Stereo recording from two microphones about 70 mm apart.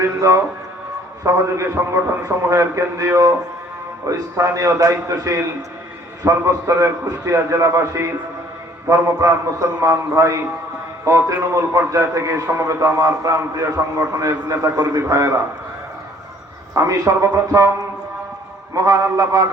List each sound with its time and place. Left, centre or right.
0.2 s a man's voice: right
16.7 s speech: right
18.7 s speech: right